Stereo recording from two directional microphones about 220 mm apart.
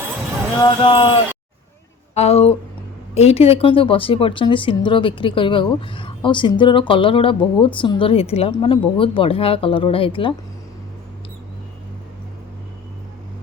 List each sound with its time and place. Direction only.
0.6 s speech: 20° left (ahead or behind)
2.1 s speech: 30° left (ahead or behind)